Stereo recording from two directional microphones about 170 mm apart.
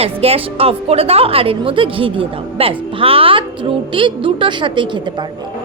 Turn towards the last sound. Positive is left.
turn(degrees=-30)  # may be behind; listen again after turning